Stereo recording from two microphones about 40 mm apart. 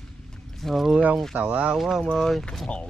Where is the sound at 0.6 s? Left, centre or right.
Centre.